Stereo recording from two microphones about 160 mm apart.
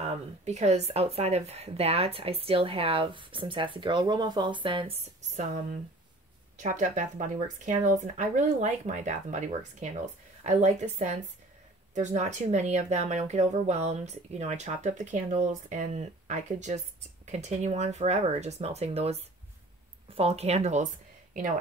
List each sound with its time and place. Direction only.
0.0 s speech: 45° right (ahead or behind)
5.3 s speech: 50° right (ahead or behind)